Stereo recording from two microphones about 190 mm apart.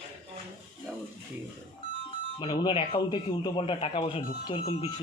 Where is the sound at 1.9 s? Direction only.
30° left (ahead or behind).